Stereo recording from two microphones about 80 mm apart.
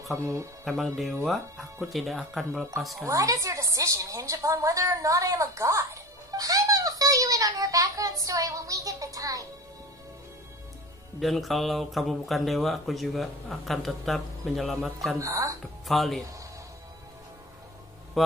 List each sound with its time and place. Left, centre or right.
0.2 s speech: right
0.7 s speech: centre
3.1 s a woman's voice: right
6.3 s a sound: right
11.1 s speech: centre
15.1 s speech: right
15.9 s speech: centre
18.2 s mantra: centre